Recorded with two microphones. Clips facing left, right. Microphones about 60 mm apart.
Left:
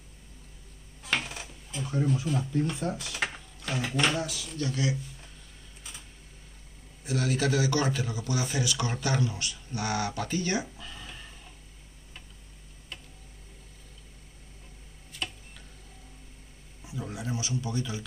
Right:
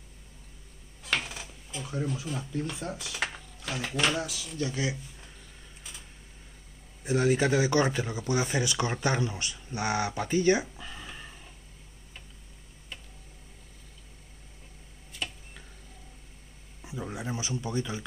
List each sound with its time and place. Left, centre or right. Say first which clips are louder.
1.0 s speech: even; centre
7.1 s speech: right 3 dB; right; by 11.3 s centre
17.1 s speech: left 1 dB; right